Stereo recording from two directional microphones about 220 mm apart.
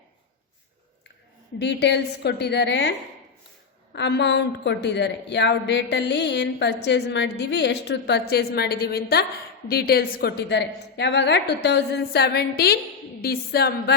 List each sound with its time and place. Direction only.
1.5 s a woman's voice: 50° left (ahead or behind)
3.9 s a woman's voice: 50° left (ahead or behind)